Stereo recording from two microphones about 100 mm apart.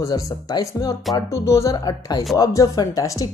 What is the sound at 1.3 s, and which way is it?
Speech, 30° left (ahead or behind).